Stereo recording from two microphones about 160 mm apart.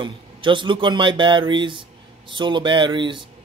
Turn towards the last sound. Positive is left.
turn(degrees=-30)  # may be behind; listen again after turning